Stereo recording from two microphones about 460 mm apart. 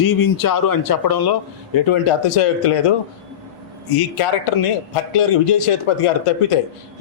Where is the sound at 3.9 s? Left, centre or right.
Left.